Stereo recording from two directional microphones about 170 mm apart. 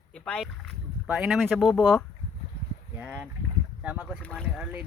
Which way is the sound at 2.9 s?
10° right (ahead or behind).